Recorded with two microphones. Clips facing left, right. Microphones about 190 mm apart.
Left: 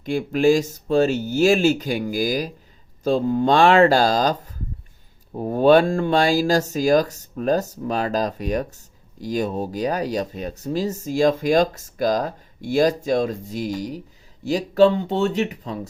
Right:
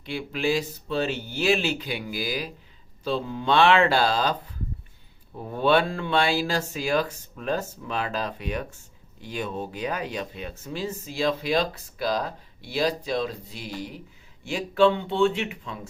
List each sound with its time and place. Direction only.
0.0 s speech: 45° left (ahead or behind)